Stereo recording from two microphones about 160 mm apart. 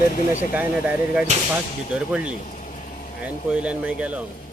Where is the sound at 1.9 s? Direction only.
5° right (ahead or behind).